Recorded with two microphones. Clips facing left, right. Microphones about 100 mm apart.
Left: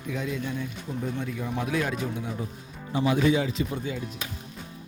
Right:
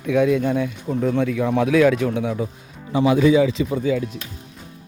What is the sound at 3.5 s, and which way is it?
Speech, 90° right.